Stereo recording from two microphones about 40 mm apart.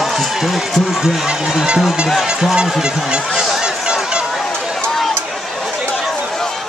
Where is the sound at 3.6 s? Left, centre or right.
Right.